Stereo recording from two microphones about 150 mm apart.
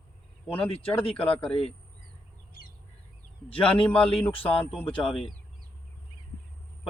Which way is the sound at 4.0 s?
35° left (ahead or behind).